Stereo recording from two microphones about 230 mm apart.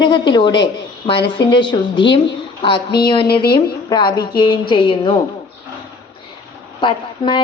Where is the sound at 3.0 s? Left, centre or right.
Left.